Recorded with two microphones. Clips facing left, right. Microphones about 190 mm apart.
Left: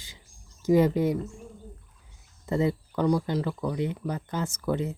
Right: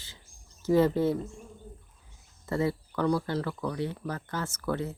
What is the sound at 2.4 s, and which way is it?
Speech, 20° left (ahead or behind).